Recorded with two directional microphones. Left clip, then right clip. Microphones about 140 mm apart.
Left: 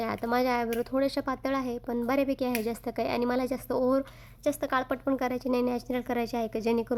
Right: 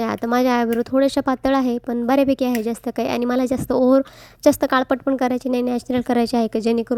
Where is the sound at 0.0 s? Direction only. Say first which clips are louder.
Right 8 dB; 40° right (ahead or behind).